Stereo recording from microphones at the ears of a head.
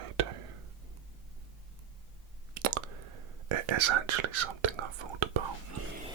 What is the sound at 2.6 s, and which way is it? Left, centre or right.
Whispering, right.